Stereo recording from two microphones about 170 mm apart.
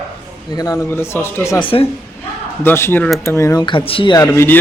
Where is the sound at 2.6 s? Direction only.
15° left (ahead or behind).